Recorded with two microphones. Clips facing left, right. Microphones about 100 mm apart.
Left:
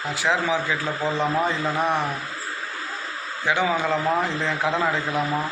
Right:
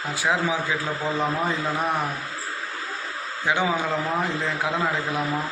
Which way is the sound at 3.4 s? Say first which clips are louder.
Left 1 dB; 15° right (ahead or behind).